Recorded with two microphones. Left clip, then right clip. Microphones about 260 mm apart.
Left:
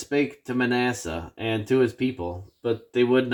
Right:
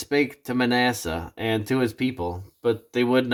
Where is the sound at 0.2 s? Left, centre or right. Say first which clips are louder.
Even; right.